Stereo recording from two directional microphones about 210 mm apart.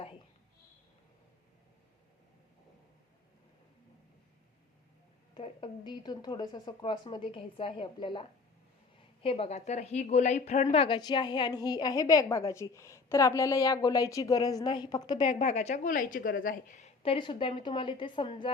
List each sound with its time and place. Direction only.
5.3 s a woman's voice: 25° left (ahead or behind)